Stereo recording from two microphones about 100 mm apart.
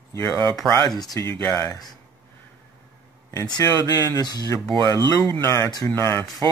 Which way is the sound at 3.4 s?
40° left (ahead or behind).